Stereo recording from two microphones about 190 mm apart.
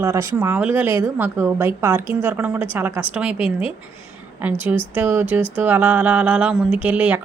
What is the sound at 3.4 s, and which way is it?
Speech, 30° left (ahead or behind).